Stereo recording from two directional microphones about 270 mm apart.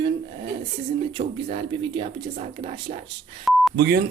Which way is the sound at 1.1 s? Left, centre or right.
Centre.